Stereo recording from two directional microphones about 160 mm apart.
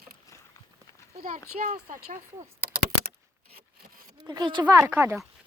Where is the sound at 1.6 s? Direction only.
65° right (ahead or behind).